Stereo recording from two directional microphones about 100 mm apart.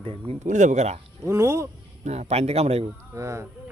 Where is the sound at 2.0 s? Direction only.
90° right.